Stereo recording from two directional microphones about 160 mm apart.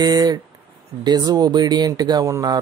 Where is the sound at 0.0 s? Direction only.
25° right (ahead or behind).